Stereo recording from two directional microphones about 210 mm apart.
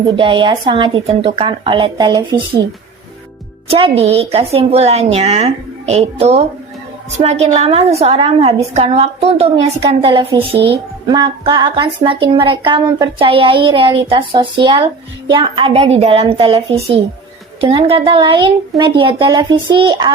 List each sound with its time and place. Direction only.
0.2 s speech: 25° right (ahead or behind)
3.7 s speech: 25° right (ahead or behind)